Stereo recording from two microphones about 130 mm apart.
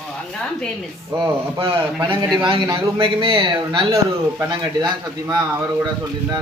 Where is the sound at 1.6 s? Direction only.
40° right (ahead or behind).